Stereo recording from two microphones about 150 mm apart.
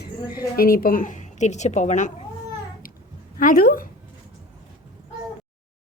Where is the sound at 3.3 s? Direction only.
65° left (ahead or behind).